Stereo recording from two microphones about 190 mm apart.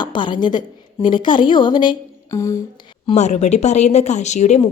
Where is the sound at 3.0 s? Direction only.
35° left (ahead or behind).